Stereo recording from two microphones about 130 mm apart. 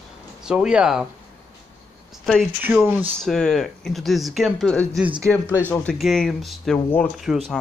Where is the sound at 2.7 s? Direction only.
15° right (ahead or behind).